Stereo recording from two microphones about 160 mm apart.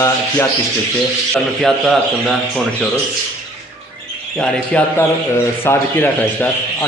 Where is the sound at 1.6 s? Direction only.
Centre (ahead or behind).